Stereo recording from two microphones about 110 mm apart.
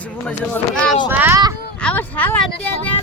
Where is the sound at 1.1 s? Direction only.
20° right (ahead or behind).